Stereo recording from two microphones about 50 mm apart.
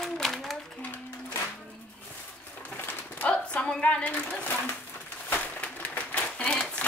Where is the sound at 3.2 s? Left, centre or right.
Left.